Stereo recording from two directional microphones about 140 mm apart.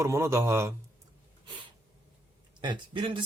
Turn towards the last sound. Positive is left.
turn(degrees=-35)  # may be behind; listen again after turning